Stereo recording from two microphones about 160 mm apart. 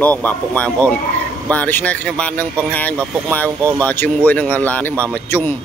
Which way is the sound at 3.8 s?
10° left (ahead or behind).